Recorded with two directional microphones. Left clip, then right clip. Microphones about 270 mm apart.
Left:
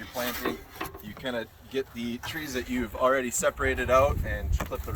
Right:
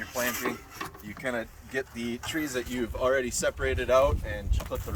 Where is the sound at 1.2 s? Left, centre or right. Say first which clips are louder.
Right 1 dB; centre.